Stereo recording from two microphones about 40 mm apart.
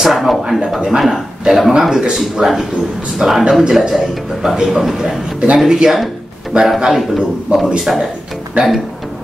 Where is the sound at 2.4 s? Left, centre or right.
Centre.